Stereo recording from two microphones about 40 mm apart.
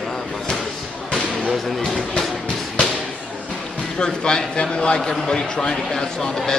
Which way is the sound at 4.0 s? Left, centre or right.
Centre.